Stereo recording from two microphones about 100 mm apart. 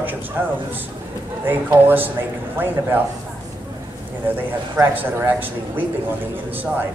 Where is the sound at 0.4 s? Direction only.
20° right (ahead or behind).